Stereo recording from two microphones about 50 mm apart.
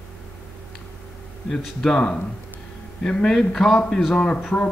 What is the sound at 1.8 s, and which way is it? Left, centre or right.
A man's voice, centre.